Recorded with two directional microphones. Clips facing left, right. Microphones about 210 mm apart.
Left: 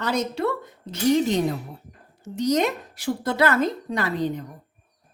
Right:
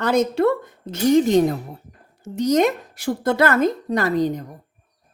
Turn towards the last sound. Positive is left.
turn(degrees=-40)  # may be behind; listen again after turning